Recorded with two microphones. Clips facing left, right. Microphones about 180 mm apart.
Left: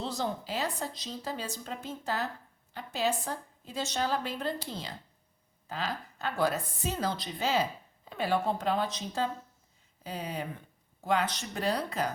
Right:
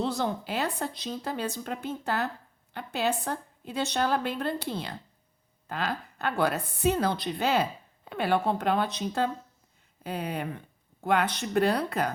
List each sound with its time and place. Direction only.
0.0 s a woman's voice: 60° right (ahead or behind)